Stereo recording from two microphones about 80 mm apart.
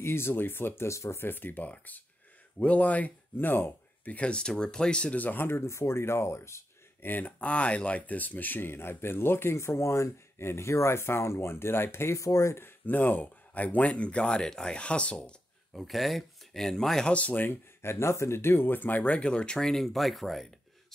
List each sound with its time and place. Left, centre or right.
0.0 s speech: left
7.1 s speech: left
15.7 s speech: centre
17.1 s speech: centre